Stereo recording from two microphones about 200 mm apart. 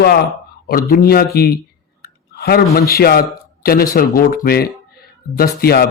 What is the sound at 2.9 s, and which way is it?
A man's voice, 50° left (ahead or behind).